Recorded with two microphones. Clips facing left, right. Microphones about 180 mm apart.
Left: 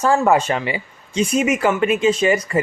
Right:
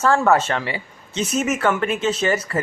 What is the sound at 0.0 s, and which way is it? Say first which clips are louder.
Speech: left 1 dB; 10° left (ahead or behind).